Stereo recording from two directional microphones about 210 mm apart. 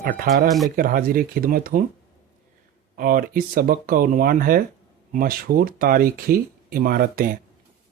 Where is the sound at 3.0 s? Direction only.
45° right (ahead or behind).